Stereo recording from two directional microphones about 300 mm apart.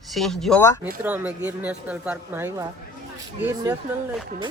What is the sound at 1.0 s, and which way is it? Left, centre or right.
Speech, centre.